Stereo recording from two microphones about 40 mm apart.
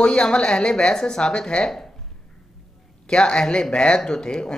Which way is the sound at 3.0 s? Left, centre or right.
Left.